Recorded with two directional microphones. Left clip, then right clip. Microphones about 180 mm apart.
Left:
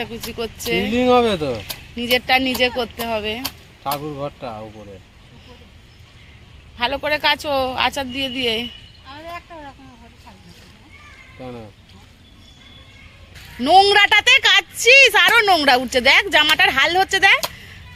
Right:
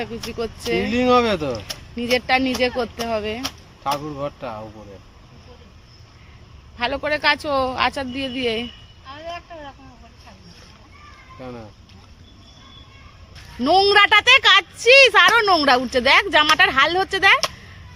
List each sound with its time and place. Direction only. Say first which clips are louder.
0.0 s a woman's voice: even; centre (ahead or behind)
0.9 s speech: left 1 dB; 45° left (ahead or behind)
1.6 s a woman's voice: left 2 dB; centre (ahead or behind)
3.8 s speech: even; 40° left (ahead or behind)
6.7 s a woman's voice: left 2 dB; centre (ahead or behind)
11.3 s speech: left 1 dB; 40° left (ahead or behind)
13.6 s a woman's voice: left 2 dB; 5° right (ahead or behind)